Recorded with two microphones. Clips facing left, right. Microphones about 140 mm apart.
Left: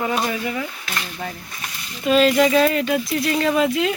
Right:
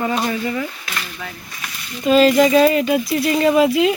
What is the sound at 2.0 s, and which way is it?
Speech, centre (ahead or behind).